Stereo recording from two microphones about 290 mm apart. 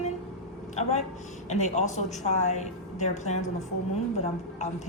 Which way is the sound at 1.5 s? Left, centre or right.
Left.